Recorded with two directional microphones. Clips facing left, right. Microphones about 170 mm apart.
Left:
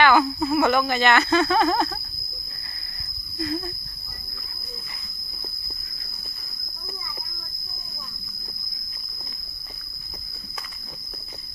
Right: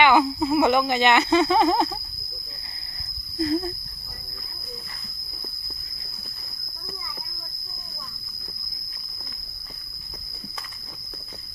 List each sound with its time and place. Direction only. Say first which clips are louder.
0.0 s speech: even; 20° right (ahead or behind)
3.3 s speech: right 5 dB; 30° right (ahead or behind)